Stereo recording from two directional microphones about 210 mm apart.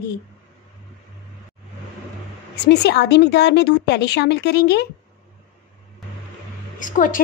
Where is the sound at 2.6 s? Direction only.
55° left (ahead or behind).